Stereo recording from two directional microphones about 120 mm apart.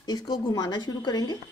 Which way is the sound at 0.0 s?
35° left (ahead or behind).